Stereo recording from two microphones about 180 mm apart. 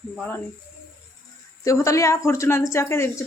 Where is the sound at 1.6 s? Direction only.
15° left (ahead or behind).